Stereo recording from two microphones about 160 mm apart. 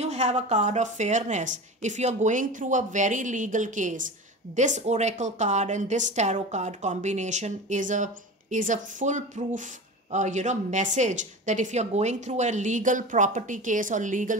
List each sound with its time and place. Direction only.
0.0 s a woman's voice: 45° right (ahead or behind)